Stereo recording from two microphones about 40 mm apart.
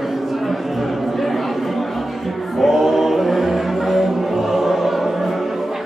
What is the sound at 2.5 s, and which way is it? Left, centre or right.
Music, centre.